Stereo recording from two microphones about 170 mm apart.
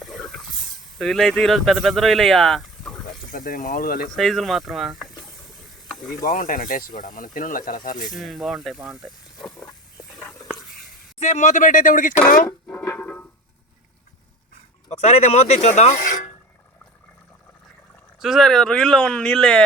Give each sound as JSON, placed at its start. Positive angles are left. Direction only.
{"t": 0.0, "sound": "a sound", "side_deg": 0}
{"t": 0.9, "sound": "speech", "side_deg": 0}
{"t": 3.3, "sound": "speech", "side_deg": 55}
{"t": 4.1, "sound": "speech", "side_deg": 0}
{"t": 6.2, "sound": "speech", "side_deg": 50}
{"t": 8.2, "sound": "speech", "side_deg": 0}
{"t": 11.2, "sound": "speech", "side_deg": 45}
{"t": 12.5, "sound": "music", "side_deg": 10}
{"t": 14.8, "sound": "speech", "side_deg": 40}
{"t": 18.2, "sound": "speech", "side_deg": 0}